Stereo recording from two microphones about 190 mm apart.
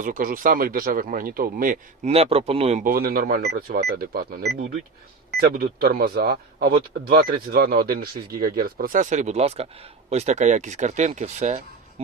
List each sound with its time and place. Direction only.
0.0 s speech: 45° right (ahead or behind)
2.0 s speech: 30° right (ahead or behind)
2.8 s speech: 50° right (ahead or behind)